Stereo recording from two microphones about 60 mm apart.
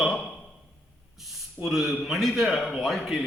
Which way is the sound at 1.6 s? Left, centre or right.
Centre.